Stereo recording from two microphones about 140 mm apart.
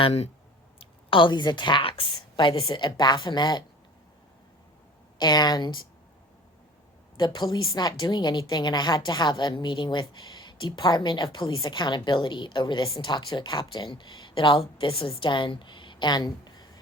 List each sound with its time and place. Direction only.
0.0 s speech: 50° left (ahead or behind)
0.8 s a woman's voice: 35° left (ahead or behind)
5.1 s a woman's voice: 30° left (ahead or behind)
7.2 s a woman's voice: 30° left (ahead or behind)